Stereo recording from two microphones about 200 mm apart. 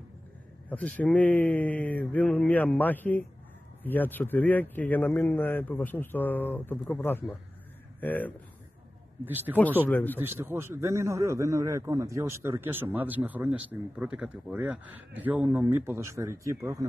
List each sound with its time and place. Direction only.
0.7 s a man's voice: 5° left (ahead or behind)
9.2 s a man's voice: 10° right (ahead or behind)
9.8 s a man's voice: 10° left (ahead or behind)
10.1 s a man's voice: 10° right (ahead or behind)